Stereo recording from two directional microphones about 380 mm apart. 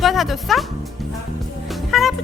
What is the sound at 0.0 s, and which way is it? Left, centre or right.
Speech, centre.